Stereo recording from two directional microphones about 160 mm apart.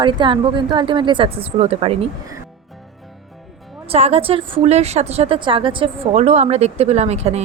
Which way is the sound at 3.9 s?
40° right (ahead or behind).